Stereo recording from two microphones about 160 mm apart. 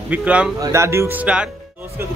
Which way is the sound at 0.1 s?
10° right (ahead or behind).